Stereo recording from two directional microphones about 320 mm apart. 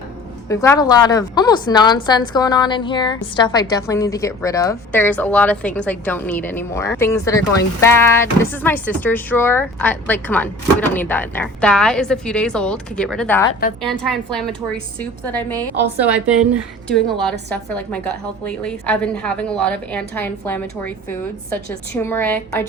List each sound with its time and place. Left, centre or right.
0.4 s a woman's voice: centre
13.5 s a woman's voice: left
13.8 s speech: centre
17.5 s speech: centre
22.0 s a woman's voice: centre